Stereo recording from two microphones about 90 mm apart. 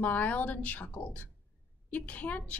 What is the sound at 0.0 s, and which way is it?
A woman's voice, 20° left (ahead or behind).